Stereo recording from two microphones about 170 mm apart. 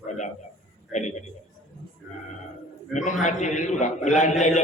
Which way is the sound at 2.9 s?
45° left (ahead or behind).